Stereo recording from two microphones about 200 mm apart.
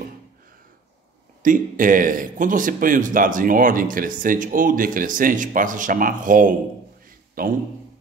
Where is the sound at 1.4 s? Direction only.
40° right (ahead or behind).